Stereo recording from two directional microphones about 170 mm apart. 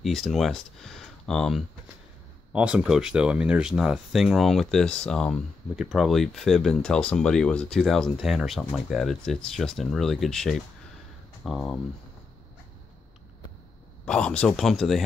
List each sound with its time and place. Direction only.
0.0 s speech: centre (ahead or behind)
14.0 s speech: 5° left (ahead or behind)